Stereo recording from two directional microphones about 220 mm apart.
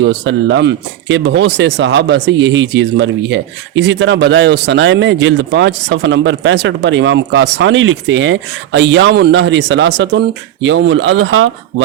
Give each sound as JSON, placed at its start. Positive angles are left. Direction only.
{"t": 0.0, "sound": "speech", "side_deg": -55}